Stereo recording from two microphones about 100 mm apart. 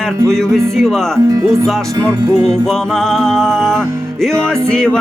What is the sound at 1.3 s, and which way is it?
Speech, 35° right (ahead or behind).